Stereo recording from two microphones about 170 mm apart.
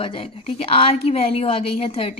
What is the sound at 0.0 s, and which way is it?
Speech, 30° left (ahead or behind).